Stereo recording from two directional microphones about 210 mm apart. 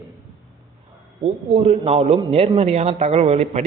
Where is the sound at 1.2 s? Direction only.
30° right (ahead or behind).